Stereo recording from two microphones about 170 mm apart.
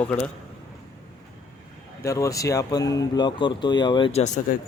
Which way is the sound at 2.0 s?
20° left (ahead or behind).